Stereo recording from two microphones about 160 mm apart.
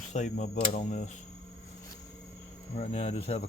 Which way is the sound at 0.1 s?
50° left (ahead or behind).